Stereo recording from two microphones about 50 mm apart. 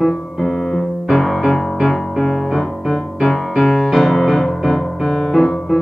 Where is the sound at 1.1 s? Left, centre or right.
Centre.